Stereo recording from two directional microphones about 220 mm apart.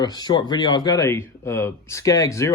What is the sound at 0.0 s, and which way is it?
Speech, 20° left (ahead or behind).